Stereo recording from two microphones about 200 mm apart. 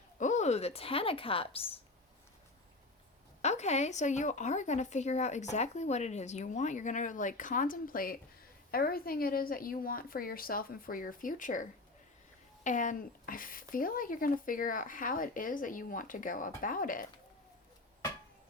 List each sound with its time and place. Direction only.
0.2 s speech: 35° left (ahead or behind)
3.4 s speech: 35° left (ahead or behind)